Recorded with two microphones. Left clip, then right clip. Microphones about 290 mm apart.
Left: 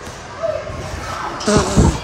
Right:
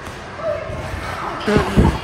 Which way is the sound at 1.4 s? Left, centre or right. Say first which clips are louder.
Left 2 dB; centre.